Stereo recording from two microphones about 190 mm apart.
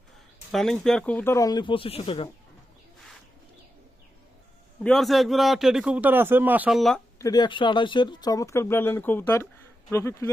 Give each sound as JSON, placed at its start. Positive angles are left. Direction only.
{"t": 0.5, "sound": "speech", "side_deg": 0}
{"t": 4.8, "sound": "a man's voice", "side_deg": 0}
{"t": 7.2, "sound": "speech", "side_deg": 20}